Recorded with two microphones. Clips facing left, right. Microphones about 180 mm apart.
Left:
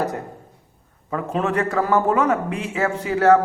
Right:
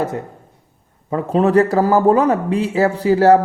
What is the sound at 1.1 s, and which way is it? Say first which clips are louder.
A man's voice: right 8 dB; 35° right (ahead or behind).